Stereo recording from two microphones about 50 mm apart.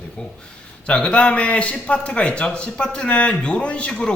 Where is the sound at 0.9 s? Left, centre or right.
Centre.